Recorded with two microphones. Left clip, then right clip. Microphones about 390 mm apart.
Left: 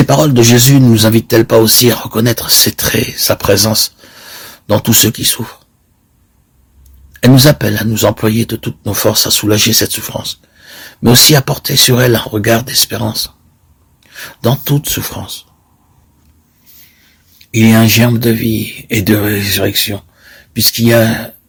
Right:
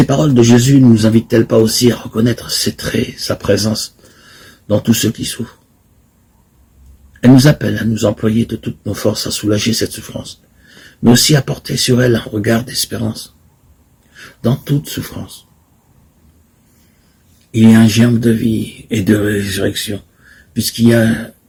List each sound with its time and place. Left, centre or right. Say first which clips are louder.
0.0 s speech: left 3 dB; left
7.2 s speech: left 2 dB; left
11.3 s speech: left 5 dB; left
14.3 s speech: left 4 dB; left
17.5 s speech: left 1 dB; left